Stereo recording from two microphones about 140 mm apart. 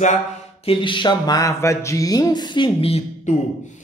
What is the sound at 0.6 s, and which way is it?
Speech, 40° left (ahead or behind).